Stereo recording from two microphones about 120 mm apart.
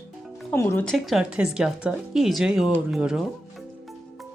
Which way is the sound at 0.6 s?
20° left (ahead or behind).